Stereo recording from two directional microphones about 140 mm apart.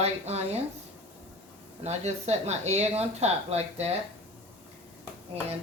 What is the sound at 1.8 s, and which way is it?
Speech, 50° right (ahead or behind).